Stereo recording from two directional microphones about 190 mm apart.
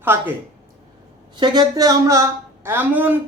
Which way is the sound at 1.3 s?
25° right (ahead or behind).